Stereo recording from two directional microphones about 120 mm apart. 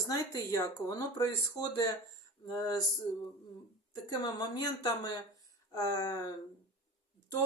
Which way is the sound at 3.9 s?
35° left (ahead or behind).